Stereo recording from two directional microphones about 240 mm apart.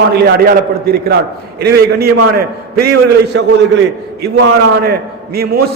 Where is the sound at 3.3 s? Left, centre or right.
Right.